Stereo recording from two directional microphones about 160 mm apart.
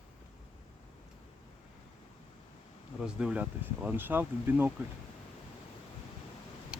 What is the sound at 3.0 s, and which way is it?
Speech, 5° right (ahead or behind).